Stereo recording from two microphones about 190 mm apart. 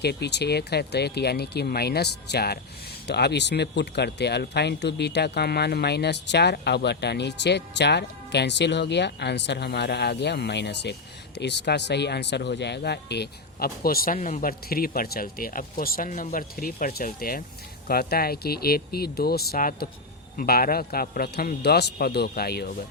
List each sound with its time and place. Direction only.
0.0 s speech: 60° left (ahead or behind)